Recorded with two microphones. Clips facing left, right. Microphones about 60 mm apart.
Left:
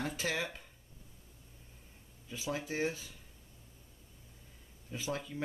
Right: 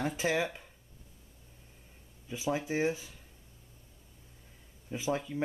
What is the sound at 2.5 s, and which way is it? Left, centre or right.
Speech, centre.